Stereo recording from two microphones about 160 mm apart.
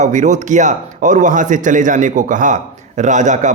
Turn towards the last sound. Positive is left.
turn(degrees=-50)  # may be behind; listen again after turning